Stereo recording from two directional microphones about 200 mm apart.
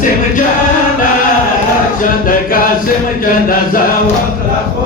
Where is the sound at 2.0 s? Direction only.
45° left (ahead or behind).